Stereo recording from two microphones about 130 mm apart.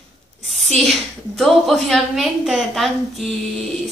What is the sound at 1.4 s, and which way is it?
A woman's voice, centre (ahead or behind).